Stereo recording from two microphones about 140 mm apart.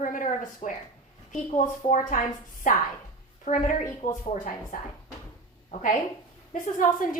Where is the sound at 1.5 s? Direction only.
65° left (ahead or behind).